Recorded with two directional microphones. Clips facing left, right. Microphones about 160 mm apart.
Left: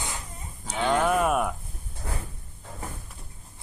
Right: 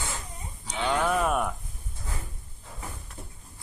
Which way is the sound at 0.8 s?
45° left (ahead or behind).